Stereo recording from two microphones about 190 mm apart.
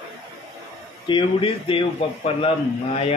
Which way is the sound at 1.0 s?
25° left (ahead or behind).